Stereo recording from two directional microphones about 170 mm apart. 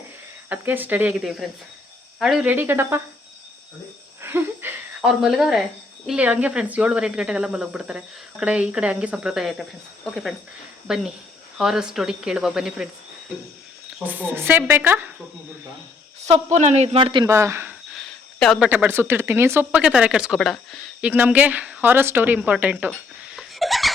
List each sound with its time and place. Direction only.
0.5 s speech: 10° right (ahead or behind)
4.2 s a sound: 15° right (ahead or behind)
5.0 s speech: 5° right (ahead or behind)
14.0 s speech: 10° right (ahead or behind)
16.2 s a man's voice: 40° right (ahead or behind)
17.2 s speech: 15° right (ahead or behind)
17.9 s a sound: centre (ahead or behind)
18.7 s speech: 10° right (ahead or behind)
21.1 s speech: 10° right (ahead or behind)
22.9 s a sound: 5° right (ahead or behind)